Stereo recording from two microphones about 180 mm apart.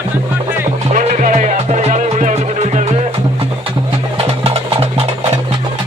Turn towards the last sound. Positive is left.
turn(degrees=-35)  # may be behind; listen again after turning